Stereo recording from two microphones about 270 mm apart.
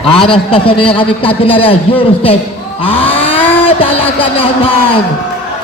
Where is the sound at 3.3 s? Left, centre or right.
Left.